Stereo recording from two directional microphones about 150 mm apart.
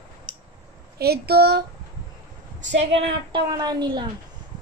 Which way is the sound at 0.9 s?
90° right.